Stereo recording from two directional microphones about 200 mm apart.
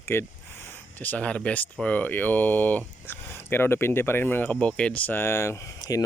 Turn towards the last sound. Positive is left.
turn(degrees=20)  # may be behind; listen again after turning